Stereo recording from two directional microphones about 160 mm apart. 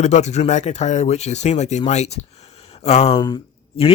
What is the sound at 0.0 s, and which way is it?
Speech, 45° left (ahead or behind).